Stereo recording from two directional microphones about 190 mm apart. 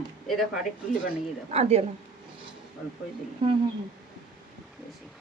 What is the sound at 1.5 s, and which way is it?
Speech, 35° right (ahead or behind).